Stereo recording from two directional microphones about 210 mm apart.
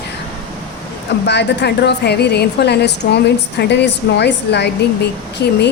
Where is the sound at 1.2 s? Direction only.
50° left (ahead or behind).